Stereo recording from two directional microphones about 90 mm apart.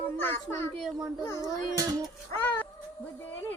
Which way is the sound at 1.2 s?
35° left (ahead or behind).